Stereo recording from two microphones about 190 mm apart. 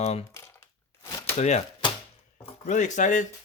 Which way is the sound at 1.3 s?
35° left (ahead or behind).